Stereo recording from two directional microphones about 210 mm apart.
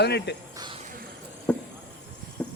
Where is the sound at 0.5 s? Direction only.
20° right (ahead or behind).